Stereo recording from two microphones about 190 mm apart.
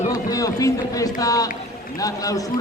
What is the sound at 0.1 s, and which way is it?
Run, 20° left (ahead or behind).